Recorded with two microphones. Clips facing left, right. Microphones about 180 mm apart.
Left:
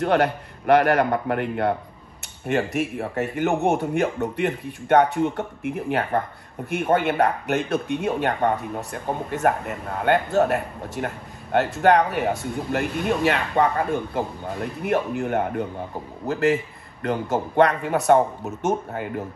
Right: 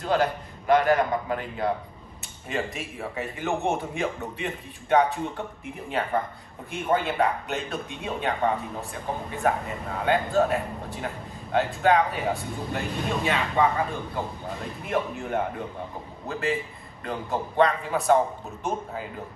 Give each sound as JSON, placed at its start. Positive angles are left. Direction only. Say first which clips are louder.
{"t": 0.0, "sound": "a man's voice", "louder": "left 4 dB", "side_deg": 65}